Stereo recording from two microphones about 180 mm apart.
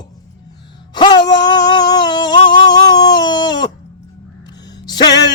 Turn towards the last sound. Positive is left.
turn(degrees=20)  # may be behind; listen again after turning